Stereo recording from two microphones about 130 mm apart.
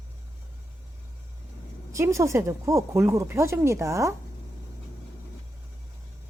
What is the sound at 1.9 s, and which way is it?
Speech, 25° right (ahead or behind).